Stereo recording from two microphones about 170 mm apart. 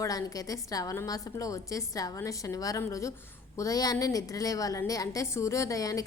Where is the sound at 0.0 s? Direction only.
20° left (ahead or behind).